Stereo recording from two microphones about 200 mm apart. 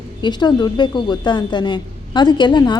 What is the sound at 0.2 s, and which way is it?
Speech, 20° left (ahead or behind).